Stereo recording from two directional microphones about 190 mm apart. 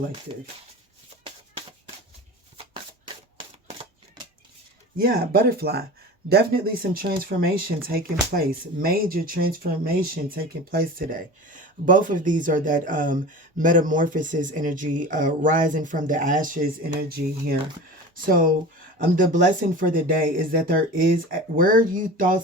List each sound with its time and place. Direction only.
0.3 s speech: 30° right (ahead or behind)
3.3 s shuffling cards: 25° right (ahead or behind)
4.9 s speech: 50° right (ahead or behind)